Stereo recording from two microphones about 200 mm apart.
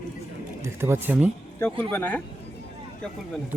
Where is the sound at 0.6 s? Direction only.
10° right (ahead or behind).